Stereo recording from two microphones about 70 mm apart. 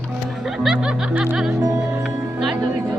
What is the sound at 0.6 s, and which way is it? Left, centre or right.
Snicker, centre.